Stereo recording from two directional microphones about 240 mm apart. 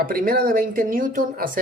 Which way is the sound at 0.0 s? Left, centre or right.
Right.